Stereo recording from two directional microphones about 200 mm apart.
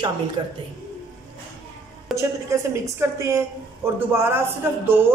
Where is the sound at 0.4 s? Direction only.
20° right (ahead or behind).